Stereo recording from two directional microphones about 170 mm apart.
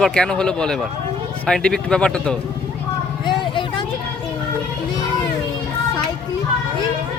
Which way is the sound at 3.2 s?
30° left (ahead or behind).